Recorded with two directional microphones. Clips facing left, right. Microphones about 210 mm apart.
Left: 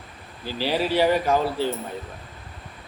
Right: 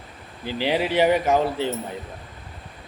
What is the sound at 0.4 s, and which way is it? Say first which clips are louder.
Speech: right 1 dB; 20° right (ahead or behind).